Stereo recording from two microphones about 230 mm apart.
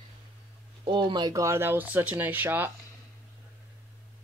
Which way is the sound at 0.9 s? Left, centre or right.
Centre.